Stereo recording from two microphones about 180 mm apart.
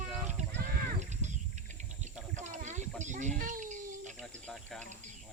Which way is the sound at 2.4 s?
40° right (ahead or behind).